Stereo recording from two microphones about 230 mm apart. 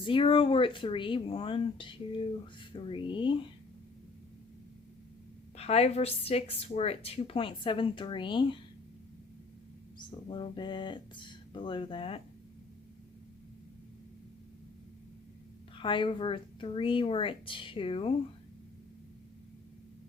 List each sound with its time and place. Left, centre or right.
0.0 s speech: left
5.5 s speech: left
10.0 s speech: left
15.7 s speech: left